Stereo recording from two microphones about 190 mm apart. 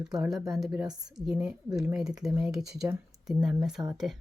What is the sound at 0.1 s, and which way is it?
Speech, centre (ahead or behind).